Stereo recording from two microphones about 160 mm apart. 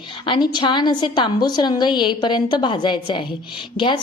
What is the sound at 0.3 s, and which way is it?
A woman's voice, 30° left (ahead or behind).